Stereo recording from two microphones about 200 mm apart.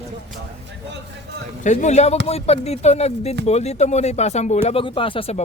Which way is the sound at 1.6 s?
35° left (ahead or behind).